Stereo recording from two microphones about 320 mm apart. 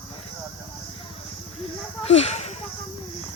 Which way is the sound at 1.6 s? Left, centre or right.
Centre.